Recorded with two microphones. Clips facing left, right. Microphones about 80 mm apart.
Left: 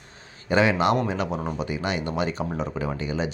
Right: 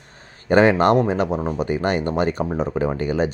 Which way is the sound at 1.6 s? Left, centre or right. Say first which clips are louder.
Right 6 dB; right.